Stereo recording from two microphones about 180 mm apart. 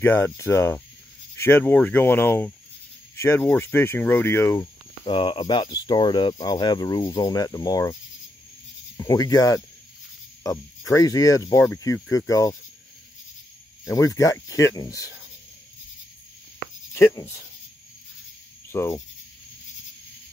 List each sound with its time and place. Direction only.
0.0 s speech: 10° left (ahead or behind)
5.0 s speech: 30° left (ahead or behind)
13.8 s speech: 15° left (ahead or behind)
16.9 s speech: 15° left (ahead or behind)
18.7 s speech: 15° left (ahead or behind)